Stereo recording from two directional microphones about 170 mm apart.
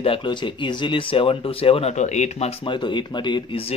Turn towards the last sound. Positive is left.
turn(degrees=30)  # may be behind; listen again after turning